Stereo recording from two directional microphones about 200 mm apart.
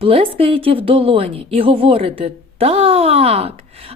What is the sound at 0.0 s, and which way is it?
A woman's voice, 25° right (ahead or behind).